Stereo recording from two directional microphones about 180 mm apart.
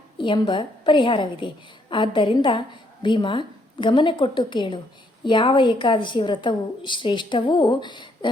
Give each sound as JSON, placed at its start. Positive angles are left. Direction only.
{"t": 0.2, "sound": "a woman's voice", "side_deg": 25}